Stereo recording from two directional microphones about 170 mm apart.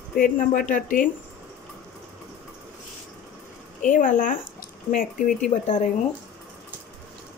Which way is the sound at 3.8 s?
50° left (ahead or behind).